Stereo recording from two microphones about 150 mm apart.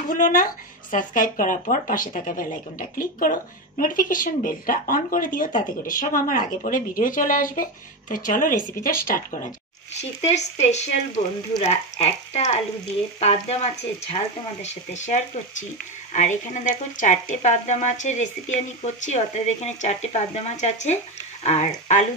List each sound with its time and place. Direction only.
0.1 s speech: 65° left (ahead or behind)
10.2 s speech: 50° left (ahead or behind)